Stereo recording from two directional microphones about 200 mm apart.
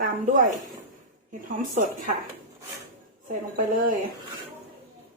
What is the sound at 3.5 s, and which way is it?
Speech, 45° right (ahead or behind).